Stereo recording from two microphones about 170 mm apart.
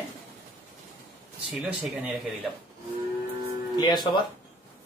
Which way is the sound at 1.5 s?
Centre (ahead or behind).